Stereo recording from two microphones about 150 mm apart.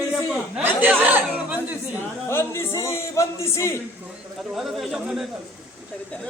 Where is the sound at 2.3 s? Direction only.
15° left (ahead or behind).